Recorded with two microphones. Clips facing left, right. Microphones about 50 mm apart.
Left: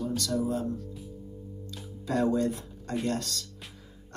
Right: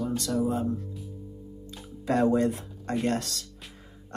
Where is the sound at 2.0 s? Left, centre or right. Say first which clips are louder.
Right 3 dB; right.